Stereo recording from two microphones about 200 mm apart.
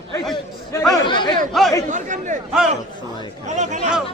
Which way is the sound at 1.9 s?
40° right (ahead or behind).